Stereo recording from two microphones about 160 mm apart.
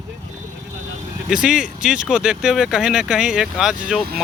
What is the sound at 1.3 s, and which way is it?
Speech, 5° right (ahead or behind).